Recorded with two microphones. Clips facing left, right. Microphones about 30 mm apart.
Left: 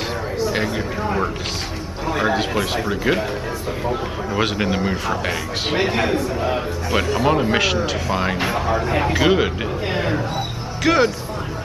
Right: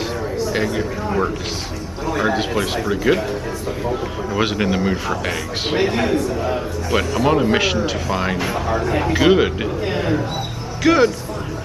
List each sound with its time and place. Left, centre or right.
0.4 s a man's voice: centre
4.4 s a man's voice: centre
7.2 s a man's voice: centre